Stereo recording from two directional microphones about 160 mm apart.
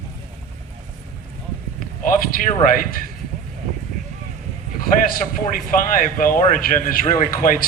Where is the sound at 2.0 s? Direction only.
60° left (ahead or behind).